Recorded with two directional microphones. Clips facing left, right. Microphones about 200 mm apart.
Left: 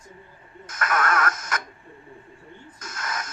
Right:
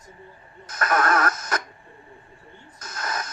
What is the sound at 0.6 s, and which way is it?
Radio, 35° right (ahead or behind).